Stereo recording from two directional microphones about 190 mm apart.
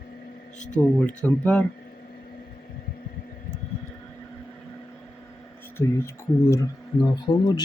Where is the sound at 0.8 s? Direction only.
10° left (ahead or behind).